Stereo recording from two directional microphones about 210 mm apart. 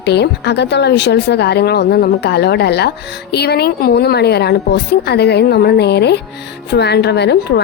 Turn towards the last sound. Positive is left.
turn(degrees=55)  # may be behind; listen again after turning